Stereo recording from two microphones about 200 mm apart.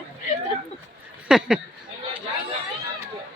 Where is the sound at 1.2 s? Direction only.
5° right (ahead or behind).